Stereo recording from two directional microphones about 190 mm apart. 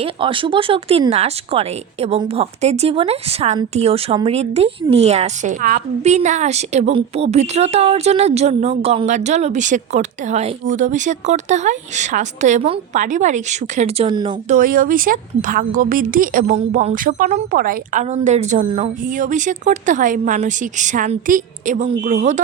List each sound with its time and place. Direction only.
0.0 s a woman's voice: 25° right (ahead or behind)
14.5 s a woman's voice: 45° right (ahead or behind)